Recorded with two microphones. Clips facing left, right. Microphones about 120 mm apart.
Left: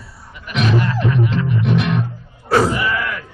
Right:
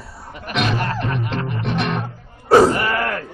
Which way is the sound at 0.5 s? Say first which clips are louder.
Left 3 dB; 45° right (ahead or behind).